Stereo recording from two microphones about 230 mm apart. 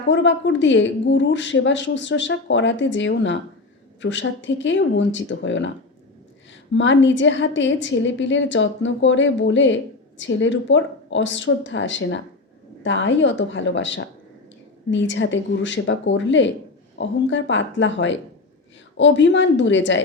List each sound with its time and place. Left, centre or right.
0.1 s a woman's voice: left